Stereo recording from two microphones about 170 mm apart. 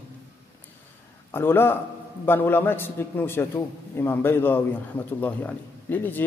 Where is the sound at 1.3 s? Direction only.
15° left (ahead or behind).